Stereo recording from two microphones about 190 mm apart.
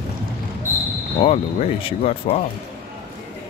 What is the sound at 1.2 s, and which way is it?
Speech, 30° left (ahead or behind).